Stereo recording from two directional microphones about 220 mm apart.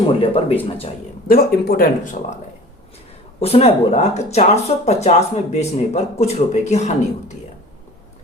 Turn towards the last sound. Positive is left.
turn(degrees=30)  # may be behind; listen again after turning